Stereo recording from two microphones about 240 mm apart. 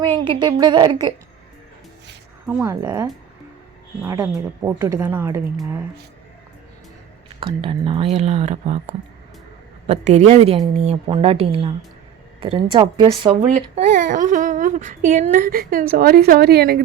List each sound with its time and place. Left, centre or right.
0.0 s a woman's voice: centre
2.5 s a woman's voice: centre
7.3 s speech: right